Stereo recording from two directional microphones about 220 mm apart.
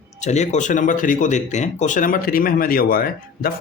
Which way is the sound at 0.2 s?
30° left (ahead or behind).